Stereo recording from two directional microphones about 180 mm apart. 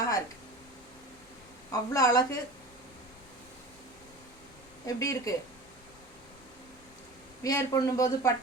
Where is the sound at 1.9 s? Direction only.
20° left (ahead or behind).